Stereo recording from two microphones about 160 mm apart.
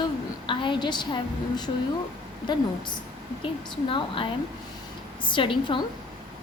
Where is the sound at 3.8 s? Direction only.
30° left (ahead or behind).